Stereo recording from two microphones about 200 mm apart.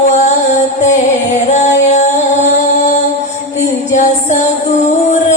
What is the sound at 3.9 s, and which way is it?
Music, 35° left (ahead or behind).